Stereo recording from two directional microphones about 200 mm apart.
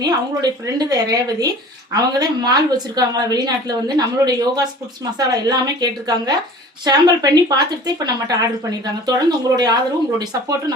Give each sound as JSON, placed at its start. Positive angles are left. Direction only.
{"t": 0.0, "sound": "speech", "side_deg": -20}